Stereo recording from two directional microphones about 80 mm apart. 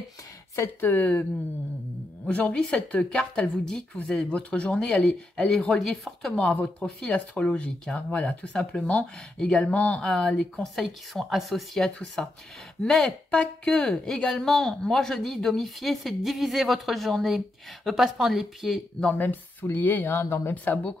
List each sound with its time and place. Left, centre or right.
0.7 s speech: left
2.2 s a woman's voice: centre
6.3 s a woman's voice: centre
19.1 s speech: left